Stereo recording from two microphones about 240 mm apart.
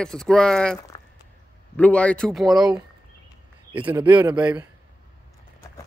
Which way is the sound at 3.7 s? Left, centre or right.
Centre.